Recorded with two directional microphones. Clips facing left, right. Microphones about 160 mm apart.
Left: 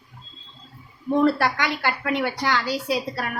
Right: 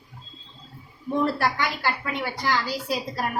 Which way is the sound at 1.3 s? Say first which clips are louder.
Left 2 dB; 70° left (ahead or behind).